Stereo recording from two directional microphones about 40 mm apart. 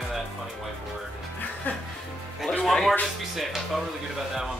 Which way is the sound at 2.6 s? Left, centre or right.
Centre.